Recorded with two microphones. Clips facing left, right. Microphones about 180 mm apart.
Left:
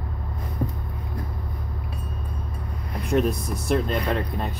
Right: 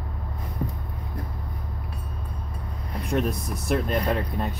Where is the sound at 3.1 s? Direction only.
Centre (ahead or behind).